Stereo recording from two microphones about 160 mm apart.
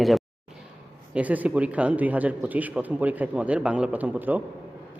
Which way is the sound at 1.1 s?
10° right (ahead or behind).